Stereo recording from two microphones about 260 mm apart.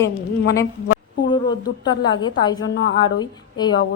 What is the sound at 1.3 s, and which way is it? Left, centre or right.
Speech, centre.